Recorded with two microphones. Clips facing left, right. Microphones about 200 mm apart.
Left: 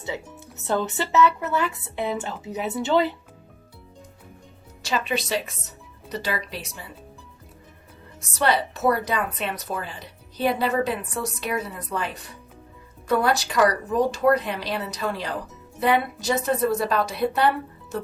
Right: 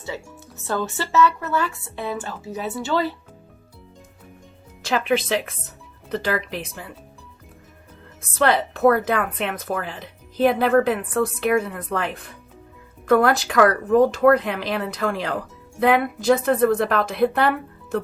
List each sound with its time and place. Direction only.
0.0 s speech: 20° left (ahead or behind)
4.9 s speech: 55° right (ahead or behind)
8.8 s speech: 55° right (ahead or behind)